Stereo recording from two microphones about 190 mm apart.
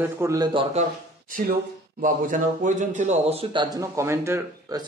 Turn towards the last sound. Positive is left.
turn(degrees=-15)  # may be behind; listen again after turning